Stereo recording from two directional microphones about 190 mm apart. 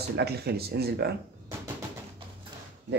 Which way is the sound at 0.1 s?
55° right (ahead or behind).